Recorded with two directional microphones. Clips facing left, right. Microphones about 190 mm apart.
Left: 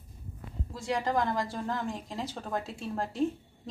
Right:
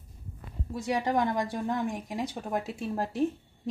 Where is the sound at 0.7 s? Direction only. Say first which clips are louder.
Right 2 dB; 20° right (ahead or behind).